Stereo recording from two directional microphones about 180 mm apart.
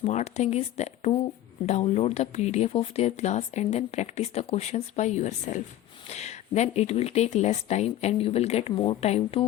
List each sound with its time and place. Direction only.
0.0 s speech: 40° left (ahead or behind)